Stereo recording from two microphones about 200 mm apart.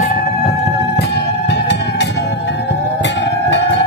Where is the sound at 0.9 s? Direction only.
55° left (ahead or behind).